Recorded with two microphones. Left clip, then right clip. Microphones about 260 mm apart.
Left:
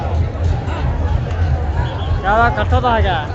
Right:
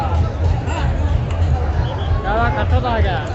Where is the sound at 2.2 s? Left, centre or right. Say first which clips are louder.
Left 5 dB; left.